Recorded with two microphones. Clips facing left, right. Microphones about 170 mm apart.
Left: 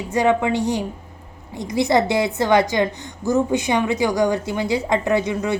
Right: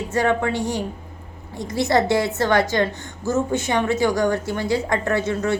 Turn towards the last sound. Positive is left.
turn(degrees=15)  # may be behind; listen again after turning